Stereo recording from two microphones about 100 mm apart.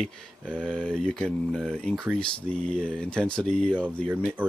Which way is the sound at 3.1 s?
10° left (ahead or behind).